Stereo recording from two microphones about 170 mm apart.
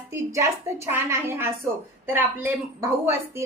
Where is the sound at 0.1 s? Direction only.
15° right (ahead or behind).